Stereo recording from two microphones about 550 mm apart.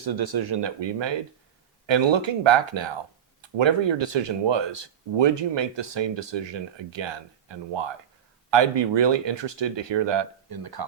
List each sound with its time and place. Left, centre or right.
0.0 s speech: right